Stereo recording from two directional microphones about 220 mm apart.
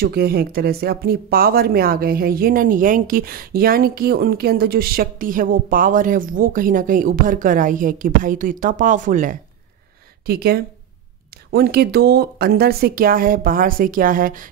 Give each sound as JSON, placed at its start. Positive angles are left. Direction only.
{"t": 0.0, "sound": "speech", "side_deg": -45}